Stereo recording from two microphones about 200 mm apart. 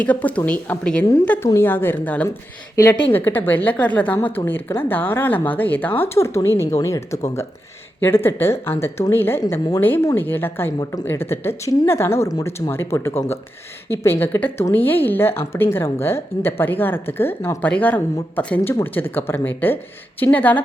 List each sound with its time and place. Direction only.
0.0 s speech: 5° left (ahead or behind)